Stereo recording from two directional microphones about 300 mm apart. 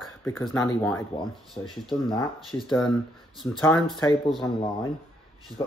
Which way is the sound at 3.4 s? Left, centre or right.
Centre.